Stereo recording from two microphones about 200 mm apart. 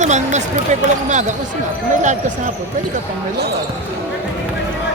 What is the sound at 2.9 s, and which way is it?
Speech, 55° right (ahead or behind).